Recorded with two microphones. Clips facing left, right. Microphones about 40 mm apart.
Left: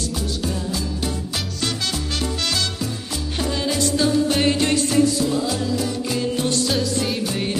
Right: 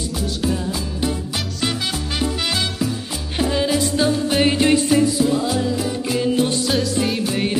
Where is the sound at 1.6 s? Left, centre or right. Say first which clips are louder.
Right 2 dB; centre.